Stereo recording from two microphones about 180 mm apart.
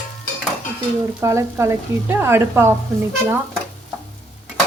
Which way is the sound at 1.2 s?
15° right (ahead or behind).